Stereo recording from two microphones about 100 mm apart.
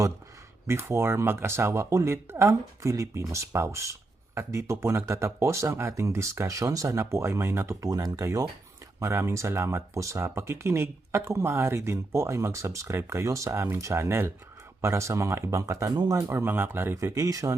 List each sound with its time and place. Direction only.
0.7 s speech: 25° right (ahead or behind)
7.9 s speech: 40° right (ahead or behind)